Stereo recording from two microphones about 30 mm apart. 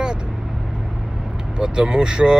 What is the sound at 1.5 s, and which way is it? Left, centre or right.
Speech, right.